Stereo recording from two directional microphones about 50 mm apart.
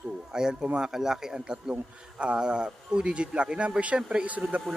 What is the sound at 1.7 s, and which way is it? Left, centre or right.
Speech, right.